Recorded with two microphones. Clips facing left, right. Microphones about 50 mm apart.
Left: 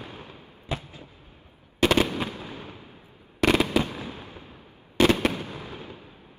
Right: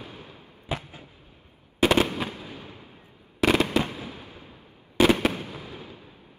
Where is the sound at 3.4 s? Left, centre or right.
Centre.